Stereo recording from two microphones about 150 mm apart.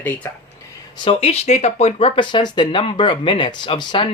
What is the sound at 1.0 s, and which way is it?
Speech, 40° left (ahead or behind).